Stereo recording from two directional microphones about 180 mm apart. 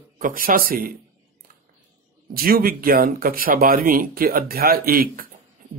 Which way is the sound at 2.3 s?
55° right (ahead or behind).